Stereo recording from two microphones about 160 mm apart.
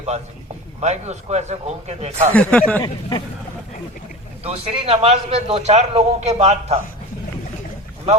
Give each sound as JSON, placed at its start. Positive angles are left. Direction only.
{"t": 0.8, "sound": "speech", "side_deg": -45}
{"t": 2.3, "sound": "speech", "side_deg": 10}
{"t": 2.8, "sound": "speech", "side_deg": 30}
{"t": 4.4, "sound": "a man's voice", "side_deg": -35}